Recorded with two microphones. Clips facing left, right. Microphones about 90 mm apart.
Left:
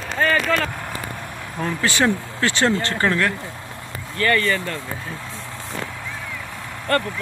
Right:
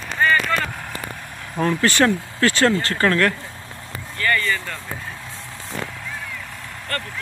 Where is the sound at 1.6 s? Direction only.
10° left (ahead or behind).